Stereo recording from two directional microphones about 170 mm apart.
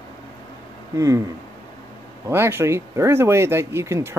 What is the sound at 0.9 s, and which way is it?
Speech, 20° right (ahead or behind).